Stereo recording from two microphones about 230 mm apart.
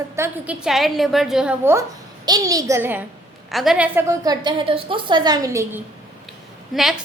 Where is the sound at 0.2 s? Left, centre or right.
Centre.